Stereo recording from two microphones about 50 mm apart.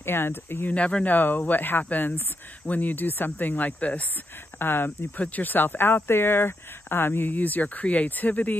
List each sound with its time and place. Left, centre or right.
0.0 s speech: left
0.7 s speech: left
1.1 s speech: left
4.6 s speech: left